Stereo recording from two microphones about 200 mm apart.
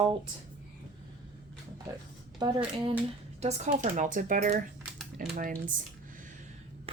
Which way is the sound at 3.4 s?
35° right (ahead or behind).